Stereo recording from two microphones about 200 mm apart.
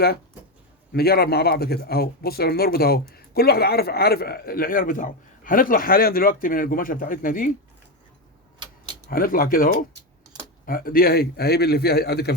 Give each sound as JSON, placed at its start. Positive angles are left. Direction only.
{"t": 0.9, "sound": "a man's voice", "side_deg": 50}
{"t": 9.0, "sound": "a man's voice", "side_deg": 45}